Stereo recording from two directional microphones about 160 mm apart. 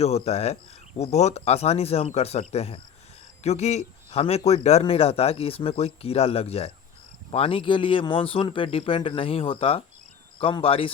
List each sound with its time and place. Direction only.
0.0 s a man's voice: 40° left (ahead or behind)